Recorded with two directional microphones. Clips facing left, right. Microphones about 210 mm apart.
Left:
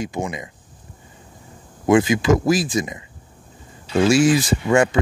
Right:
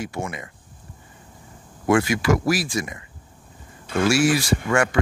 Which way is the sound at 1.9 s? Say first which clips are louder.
Left 4 dB; 20° left (ahead or behind).